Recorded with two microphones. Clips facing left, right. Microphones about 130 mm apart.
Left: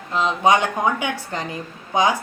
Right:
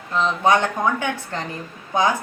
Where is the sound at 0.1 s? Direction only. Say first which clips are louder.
Left 1 dB; 15° left (ahead or behind).